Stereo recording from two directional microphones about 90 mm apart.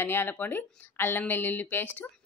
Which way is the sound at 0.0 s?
25° left (ahead or behind).